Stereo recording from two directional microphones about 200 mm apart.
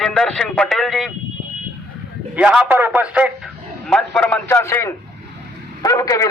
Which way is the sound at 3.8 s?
5° left (ahead or behind).